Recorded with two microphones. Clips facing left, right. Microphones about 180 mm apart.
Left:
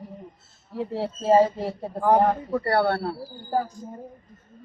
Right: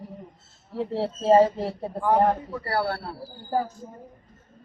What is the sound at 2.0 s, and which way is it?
Speech, 35° left (ahead or behind).